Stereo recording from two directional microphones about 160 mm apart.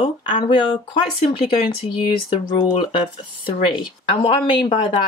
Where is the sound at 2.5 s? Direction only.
30° left (ahead or behind).